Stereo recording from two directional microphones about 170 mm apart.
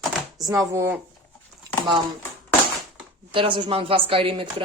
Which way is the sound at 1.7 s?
20° right (ahead or behind).